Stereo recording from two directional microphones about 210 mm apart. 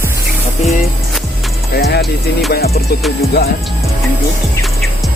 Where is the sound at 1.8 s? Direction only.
50° left (ahead or behind).